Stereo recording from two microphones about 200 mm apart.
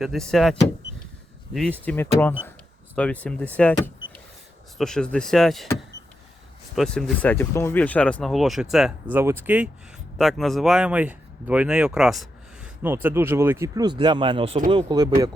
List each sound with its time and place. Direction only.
0.0 s speech: centre (ahead or behind)
1.5 s speech: 5° left (ahead or behind)
3.6 s power windows: 5° left (ahead or behind)
4.8 s speech: 5° left (ahead or behind)
6.7 s speech: 5° left (ahead or behind)
10.2 s speech: centre (ahead or behind); by 15.4 s 20° right (ahead or behind)